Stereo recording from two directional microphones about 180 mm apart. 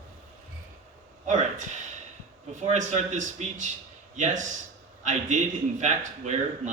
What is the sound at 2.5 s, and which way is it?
A man's voice, 40° right (ahead or behind).